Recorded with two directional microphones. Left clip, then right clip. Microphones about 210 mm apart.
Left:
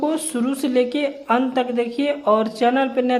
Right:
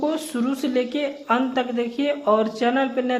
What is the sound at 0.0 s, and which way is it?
A man's voice, 15° left (ahead or behind).